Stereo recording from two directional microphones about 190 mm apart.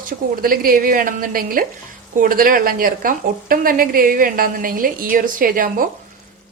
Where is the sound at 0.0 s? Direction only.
50° right (ahead or behind).